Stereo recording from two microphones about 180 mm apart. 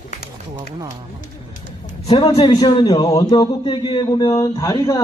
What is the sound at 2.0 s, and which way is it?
A man's voice, 25° left (ahead or behind).